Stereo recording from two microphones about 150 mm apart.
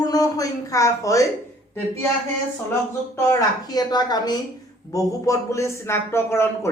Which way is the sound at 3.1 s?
20° left (ahead or behind).